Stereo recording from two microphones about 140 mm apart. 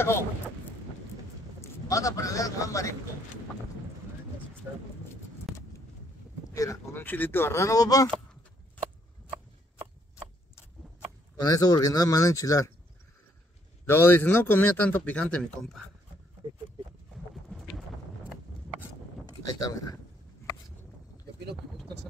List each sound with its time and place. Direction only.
1.6 s a man's voice: 25° left (ahead or behind)
5.5 s vehicle: centre (ahead or behind)
6.5 s speech: 25° left (ahead or behind)
11.3 s speech: 25° left (ahead or behind)
13.8 s a man's voice: 15° left (ahead or behind)
17.1 s a sound: centre (ahead or behind)
19.4 s speech: 25° left (ahead or behind)